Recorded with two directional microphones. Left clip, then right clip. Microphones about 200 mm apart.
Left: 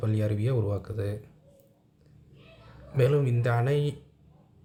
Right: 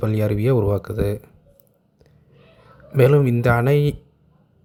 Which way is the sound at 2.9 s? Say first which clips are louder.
Right 10 dB; 40° right (ahead or behind).